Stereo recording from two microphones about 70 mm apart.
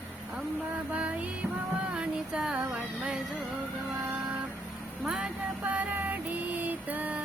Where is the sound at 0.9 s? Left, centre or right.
Centre.